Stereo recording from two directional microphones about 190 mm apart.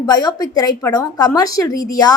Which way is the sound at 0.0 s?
20° left (ahead or behind).